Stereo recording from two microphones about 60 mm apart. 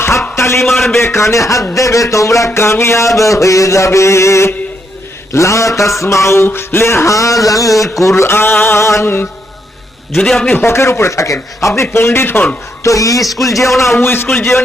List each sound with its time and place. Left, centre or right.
0.3 s a sound: left
0.6 s a man's voice: centre
0.9 s music: left
7.9 s a man's voice: left
10.2 s a man's voice: centre
10.6 s a man's voice: left
11.8 s a man's voice: left
12.8 s music: left
13.4 s a man's voice: left
14.0 s a man's voice: left